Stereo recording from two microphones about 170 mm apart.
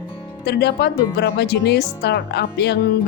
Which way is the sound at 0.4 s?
80° left.